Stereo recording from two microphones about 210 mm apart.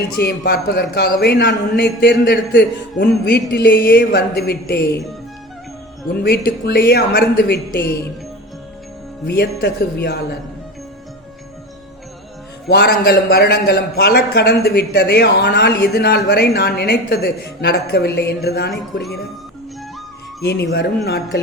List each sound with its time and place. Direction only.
0.2 s a man's voice: 50° left (ahead or behind)
6.2 s a man's voice: 50° left (ahead or behind)
9.2 s a man's voice: 45° left (ahead or behind)
12.6 s a man's voice: 50° left (ahead or behind)
20.4 s a man's voice: 50° left (ahead or behind)